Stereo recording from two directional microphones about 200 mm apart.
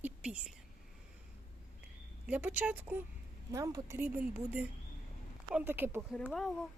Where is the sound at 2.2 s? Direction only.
10° right (ahead or behind).